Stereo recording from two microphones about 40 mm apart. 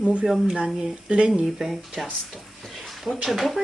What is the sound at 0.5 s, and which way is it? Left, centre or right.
Speech, centre.